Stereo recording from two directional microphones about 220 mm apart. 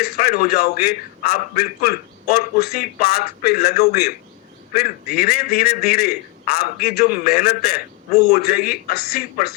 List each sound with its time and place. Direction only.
0.0 s a man's voice: 45° left (ahead or behind)
8.1 s a man's voice: 30° left (ahead or behind)
8.4 s a man's voice: 45° left (ahead or behind)